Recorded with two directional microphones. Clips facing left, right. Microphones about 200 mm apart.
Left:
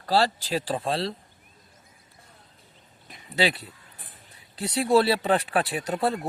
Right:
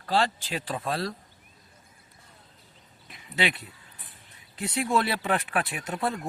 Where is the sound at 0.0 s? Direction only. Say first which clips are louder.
Left 3 dB; 40° left (ahead or behind).